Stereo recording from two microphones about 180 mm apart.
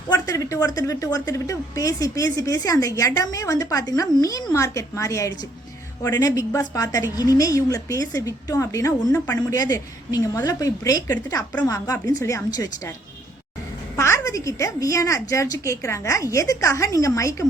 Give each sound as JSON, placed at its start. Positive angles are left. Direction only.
{"t": 0.1, "sound": "a woman's voice", "side_deg": 20}
{"t": 13.9, "sound": "a woman's voice", "side_deg": 15}